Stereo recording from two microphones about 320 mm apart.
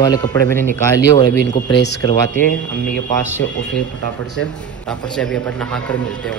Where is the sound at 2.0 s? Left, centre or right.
Centre.